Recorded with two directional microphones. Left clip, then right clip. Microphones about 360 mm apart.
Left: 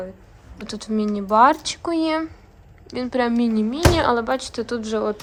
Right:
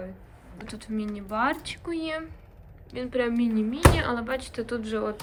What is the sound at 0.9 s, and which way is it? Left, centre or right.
Speech, centre.